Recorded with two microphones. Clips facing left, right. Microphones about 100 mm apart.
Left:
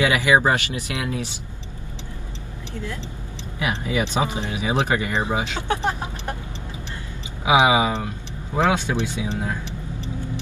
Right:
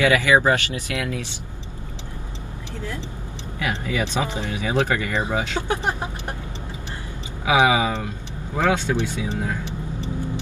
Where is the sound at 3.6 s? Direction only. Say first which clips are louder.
Left 1 dB; 20° left (ahead or behind).